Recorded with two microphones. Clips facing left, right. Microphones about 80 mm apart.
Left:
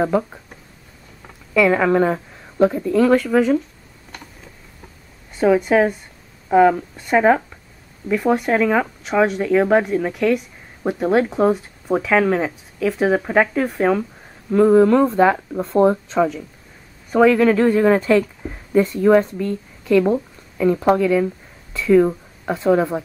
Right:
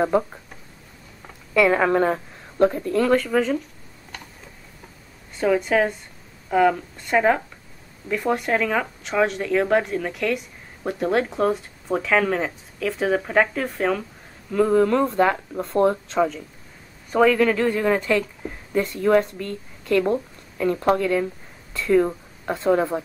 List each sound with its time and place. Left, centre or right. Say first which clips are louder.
0.0 s speech: left 1 dB; centre
5.4 s speech: left 5 dB; centre
17.4 s speech: left 5 dB; left
18.7 s speech: left 7 dB; centre
18.9 s speech: left 3 dB; centre
20.6 s speech: left 4 dB; centre